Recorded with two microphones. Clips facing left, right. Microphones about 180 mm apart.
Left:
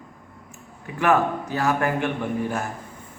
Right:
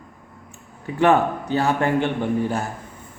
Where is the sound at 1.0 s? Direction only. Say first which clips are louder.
Right 3 dB; 30° right (ahead or behind).